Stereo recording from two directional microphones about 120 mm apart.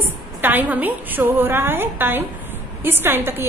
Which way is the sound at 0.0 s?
15° right (ahead or behind).